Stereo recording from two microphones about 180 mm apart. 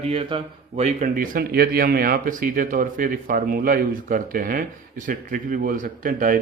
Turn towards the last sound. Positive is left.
turn(degrees=-50)  # may be behind; listen again after turning